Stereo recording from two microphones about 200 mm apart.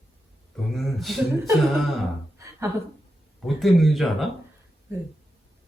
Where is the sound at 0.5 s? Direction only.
Centre (ahead or behind).